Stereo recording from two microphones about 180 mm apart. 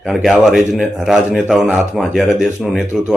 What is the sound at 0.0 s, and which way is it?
Speech, centre (ahead or behind).